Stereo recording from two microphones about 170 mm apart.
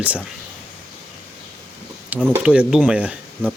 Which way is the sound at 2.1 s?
5° right (ahead or behind).